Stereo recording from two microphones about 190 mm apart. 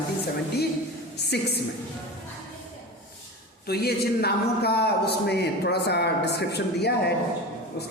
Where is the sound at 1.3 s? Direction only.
60° left (ahead or behind).